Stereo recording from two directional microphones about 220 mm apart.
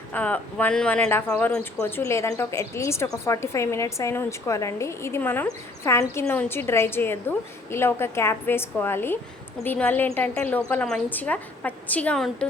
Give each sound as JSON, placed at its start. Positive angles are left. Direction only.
{"t": 0.1, "sound": "speech", "side_deg": 5}